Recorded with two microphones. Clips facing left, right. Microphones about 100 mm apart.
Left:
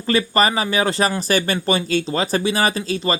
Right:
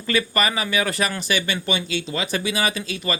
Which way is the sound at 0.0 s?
35° left (ahead or behind).